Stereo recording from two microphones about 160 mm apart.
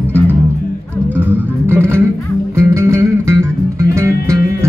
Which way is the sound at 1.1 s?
10° right (ahead or behind).